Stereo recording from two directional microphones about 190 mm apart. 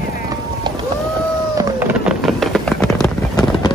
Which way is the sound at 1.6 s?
10° right (ahead or behind).